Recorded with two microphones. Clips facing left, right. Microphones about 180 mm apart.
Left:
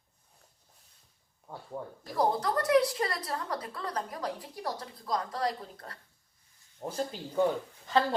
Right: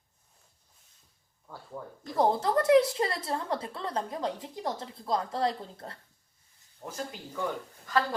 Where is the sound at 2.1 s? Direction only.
25° right (ahead or behind).